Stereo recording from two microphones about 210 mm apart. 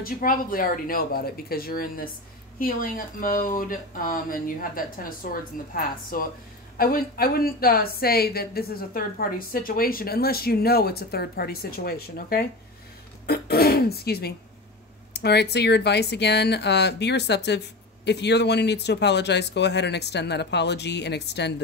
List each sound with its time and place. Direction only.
0.0 s a woman's voice: 40° left (ahead or behind)